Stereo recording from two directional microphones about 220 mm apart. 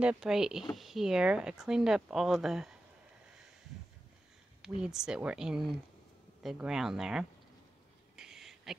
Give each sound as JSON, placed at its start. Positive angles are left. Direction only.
{"t": 0.0, "sound": "speech", "side_deg": -5}
{"t": 4.8, "sound": "speech", "side_deg": -5}
{"t": 8.2, "sound": "a sound", "side_deg": 0}